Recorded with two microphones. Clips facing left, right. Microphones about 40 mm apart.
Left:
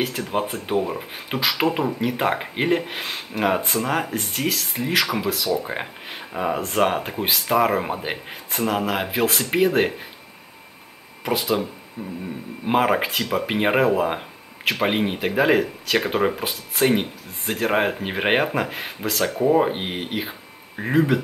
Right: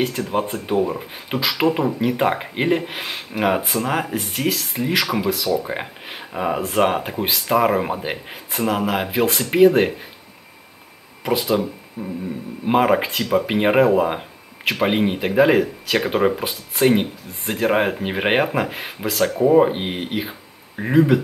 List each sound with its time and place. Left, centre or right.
0.0 s speech: centre
11.2 s speech: centre
12.0 s a sound: centre
12.6 s speech: centre